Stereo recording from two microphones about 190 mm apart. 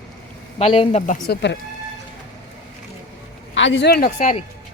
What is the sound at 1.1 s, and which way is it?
Speech, 60° left (ahead or behind).